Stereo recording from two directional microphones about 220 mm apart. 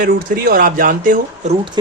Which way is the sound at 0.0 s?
40° right (ahead or behind).